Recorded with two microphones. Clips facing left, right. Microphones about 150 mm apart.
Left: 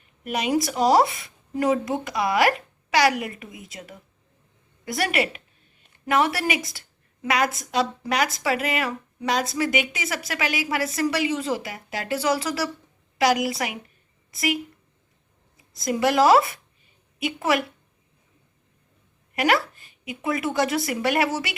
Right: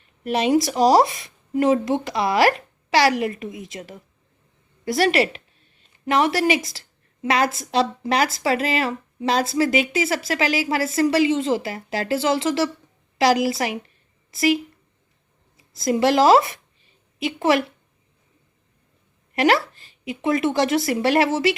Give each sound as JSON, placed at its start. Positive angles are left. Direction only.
{"t": 0.3, "sound": "a woman's voice", "side_deg": -30}
{"t": 6.7, "sound": "a sound", "side_deg": -25}
{"t": 7.6, "sound": "a woman's voice", "side_deg": -30}
{"t": 15.8, "sound": "a woman's voice", "side_deg": -30}
{"t": 19.4, "sound": "a woman's voice", "side_deg": -25}